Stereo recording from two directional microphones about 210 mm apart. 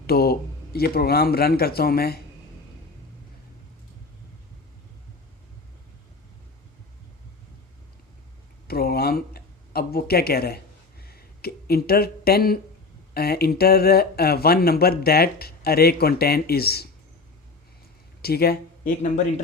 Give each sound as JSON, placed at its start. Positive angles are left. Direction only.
{"t": 0.1, "sound": "speech", "side_deg": 45}
{"t": 8.6, "sound": "a sound", "side_deg": 45}
{"t": 13.1, "sound": "speech", "side_deg": 50}
{"t": 18.2, "sound": "speech", "side_deg": 45}